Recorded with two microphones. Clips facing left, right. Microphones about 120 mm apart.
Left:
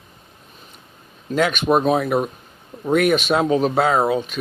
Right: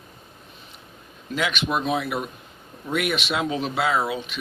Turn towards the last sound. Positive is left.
turn(degrees=45)  # may be behind; listen again after turning